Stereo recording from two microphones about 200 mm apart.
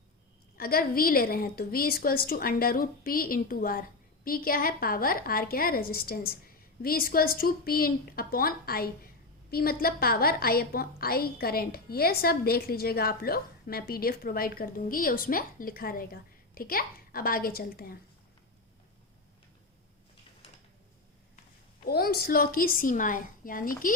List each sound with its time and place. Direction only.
0.5 s a woman's voice: 50° left (ahead or behind)
21.8 s a woman's voice: 50° left (ahead or behind)